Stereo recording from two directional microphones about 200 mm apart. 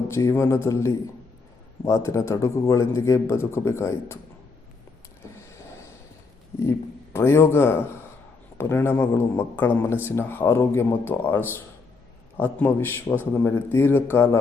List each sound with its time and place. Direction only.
0.1 s a man's voice: 15° left (ahead or behind)
6.6 s a man's voice: 10° left (ahead or behind)